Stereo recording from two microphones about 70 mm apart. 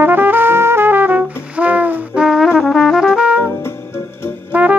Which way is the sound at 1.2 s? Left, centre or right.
Right.